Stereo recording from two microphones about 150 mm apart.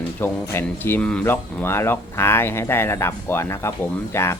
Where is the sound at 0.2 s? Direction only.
15° left (ahead or behind).